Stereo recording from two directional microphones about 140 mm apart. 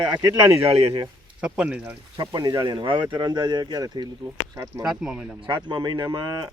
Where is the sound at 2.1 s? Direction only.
30° right (ahead or behind).